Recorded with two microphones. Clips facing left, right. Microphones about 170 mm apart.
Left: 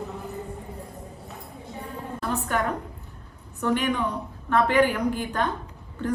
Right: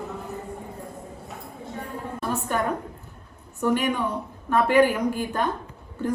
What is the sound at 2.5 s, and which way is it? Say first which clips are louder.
A man's voice: right 1 dB; 15° right (ahead or behind).